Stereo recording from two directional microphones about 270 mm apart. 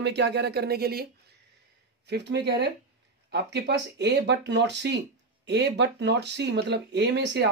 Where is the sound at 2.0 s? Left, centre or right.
Right.